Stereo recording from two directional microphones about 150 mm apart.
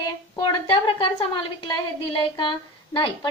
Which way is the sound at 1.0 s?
35° left (ahead or behind).